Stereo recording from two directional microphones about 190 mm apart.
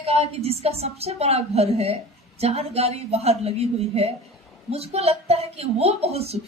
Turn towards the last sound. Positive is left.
turn(degrees=-30)  # may be behind; listen again after turning